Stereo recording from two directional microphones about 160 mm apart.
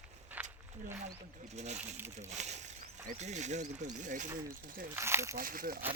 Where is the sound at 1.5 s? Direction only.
45° right (ahead or behind).